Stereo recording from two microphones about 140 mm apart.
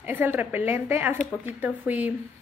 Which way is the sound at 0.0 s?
15° right (ahead or behind).